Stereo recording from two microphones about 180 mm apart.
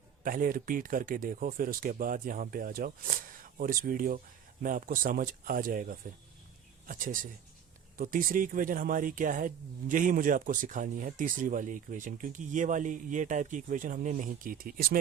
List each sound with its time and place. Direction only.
0.2 s speech: 50° right (ahead or behind)